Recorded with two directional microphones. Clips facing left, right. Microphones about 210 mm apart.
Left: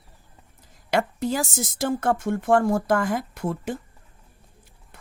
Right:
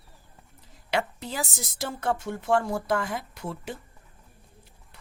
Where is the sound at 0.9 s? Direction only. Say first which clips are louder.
Left 6 dB; 45° left (ahead or behind).